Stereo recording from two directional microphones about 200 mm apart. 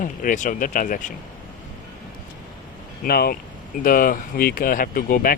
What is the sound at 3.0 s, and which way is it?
Speech, 50° left (ahead or behind).